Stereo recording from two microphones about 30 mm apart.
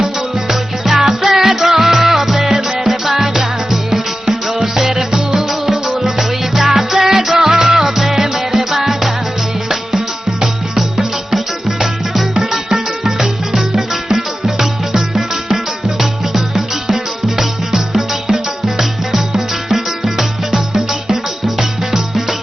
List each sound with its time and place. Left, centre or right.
0.0 s music: centre
10.8 s music: centre
21.4 s music: centre